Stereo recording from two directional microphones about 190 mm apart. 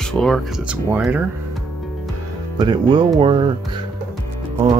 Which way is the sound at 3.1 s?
25° right (ahead or behind).